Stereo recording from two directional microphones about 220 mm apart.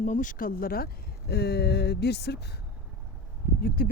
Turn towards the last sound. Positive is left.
turn(degrees=40)  # may be behind; listen again after turning